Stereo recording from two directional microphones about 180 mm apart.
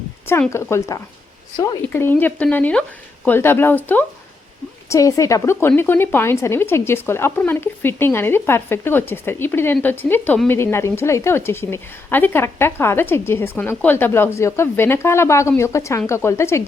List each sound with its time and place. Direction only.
0.3 s speech: 10° left (ahead or behind)